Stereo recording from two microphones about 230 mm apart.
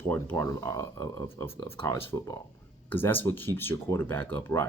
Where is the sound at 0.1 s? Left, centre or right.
Centre.